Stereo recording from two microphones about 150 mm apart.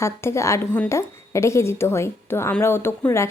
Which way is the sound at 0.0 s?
20° left (ahead or behind).